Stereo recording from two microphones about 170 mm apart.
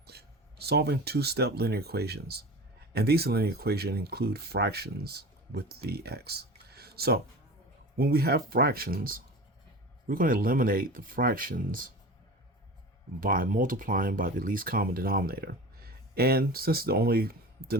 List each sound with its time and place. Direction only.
0.0 s speech: 70° right (ahead or behind); by 11.9 s 55° right (ahead or behind)
13.1 s speech: 55° right (ahead or behind)